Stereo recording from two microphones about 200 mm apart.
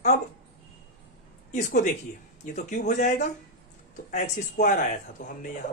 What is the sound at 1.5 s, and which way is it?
Speech, 40° left (ahead or behind).